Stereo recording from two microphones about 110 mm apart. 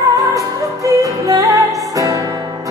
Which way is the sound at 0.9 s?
30° right (ahead or behind).